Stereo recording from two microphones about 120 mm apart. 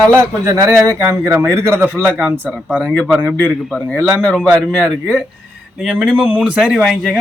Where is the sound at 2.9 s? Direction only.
5° left (ahead or behind).